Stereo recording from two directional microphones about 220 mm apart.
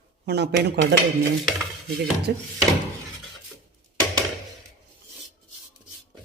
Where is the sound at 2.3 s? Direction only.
50° right (ahead or behind).